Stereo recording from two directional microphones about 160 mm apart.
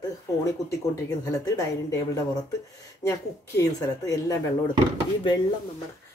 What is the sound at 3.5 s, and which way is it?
Speech, 20° left (ahead or behind).